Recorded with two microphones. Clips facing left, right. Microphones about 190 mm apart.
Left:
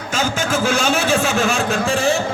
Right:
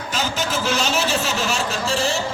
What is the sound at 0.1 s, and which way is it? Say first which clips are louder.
A man's voice: left 4 dB; 50° left (ahead or behind).